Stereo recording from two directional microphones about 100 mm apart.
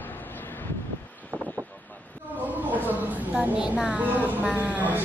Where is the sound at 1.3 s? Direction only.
15° left (ahead or behind).